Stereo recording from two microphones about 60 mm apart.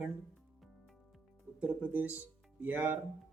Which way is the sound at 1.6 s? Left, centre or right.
Right.